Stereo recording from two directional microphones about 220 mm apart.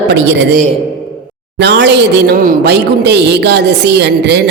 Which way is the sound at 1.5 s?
50° right (ahead or behind).